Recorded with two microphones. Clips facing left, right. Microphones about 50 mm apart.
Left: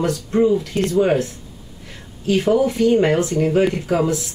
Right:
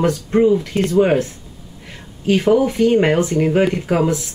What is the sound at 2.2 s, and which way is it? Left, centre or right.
Speech, right.